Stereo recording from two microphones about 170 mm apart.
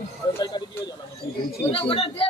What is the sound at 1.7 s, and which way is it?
Speech, 35° left (ahead or behind).